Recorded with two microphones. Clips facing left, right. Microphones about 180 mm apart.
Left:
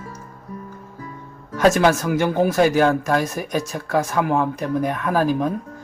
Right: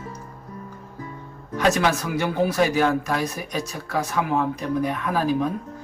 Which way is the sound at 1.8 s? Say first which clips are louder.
Left 5 dB; 50° left (ahead or behind).